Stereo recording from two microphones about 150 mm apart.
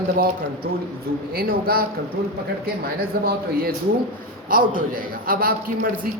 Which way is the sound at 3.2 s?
90° right.